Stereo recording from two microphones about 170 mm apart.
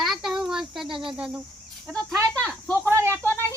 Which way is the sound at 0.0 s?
Centre (ahead or behind).